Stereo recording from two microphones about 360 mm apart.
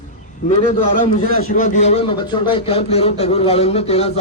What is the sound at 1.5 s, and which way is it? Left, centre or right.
A man's voice, centre.